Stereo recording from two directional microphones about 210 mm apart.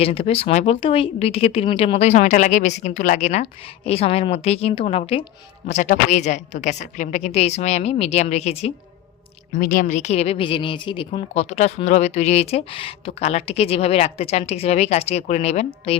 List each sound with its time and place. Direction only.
0.0 s a woman's voice: 30° left (ahead or behind)
9.5 s a woman's voice: 40° left (ahead or behind)